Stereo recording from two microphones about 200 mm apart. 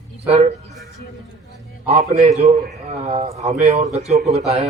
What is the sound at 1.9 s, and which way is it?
Speech, 35° right (ahead or behind).